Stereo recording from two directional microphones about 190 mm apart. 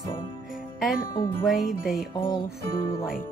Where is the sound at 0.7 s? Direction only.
Centre (ahead or behind).